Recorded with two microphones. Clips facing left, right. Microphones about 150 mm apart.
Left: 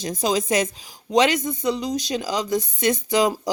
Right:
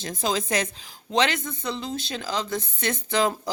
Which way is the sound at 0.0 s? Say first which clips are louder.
Left 4 dB; 20° left (ahead or behind).